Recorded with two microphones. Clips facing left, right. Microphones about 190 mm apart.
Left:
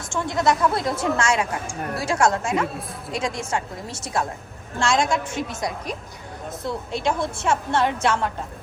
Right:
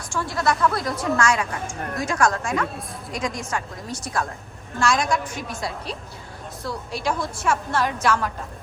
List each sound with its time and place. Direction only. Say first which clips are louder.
0.0 s a woman's voice: left 2 dB; 20° left (ahead or behind)